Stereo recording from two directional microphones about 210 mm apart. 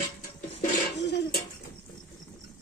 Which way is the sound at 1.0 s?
55° left (ahead or behind).